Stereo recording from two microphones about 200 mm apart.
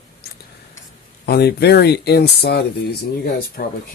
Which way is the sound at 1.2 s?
55° left (ahead or behind).